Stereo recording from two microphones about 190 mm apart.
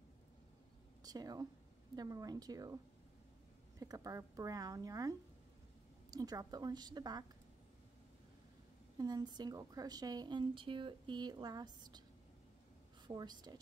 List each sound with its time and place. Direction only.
1.0 s a woman's voice: 20° right (ahead or behind)
3.8 s a woman's voice: 15° right (ahead or behind)
8.9 s a woman's voice: 20° right (ahead or behind)
13.0 s a woman's voice: 20° right (ahead or behind)